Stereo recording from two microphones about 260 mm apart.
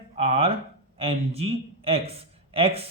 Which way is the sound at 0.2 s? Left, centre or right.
Right.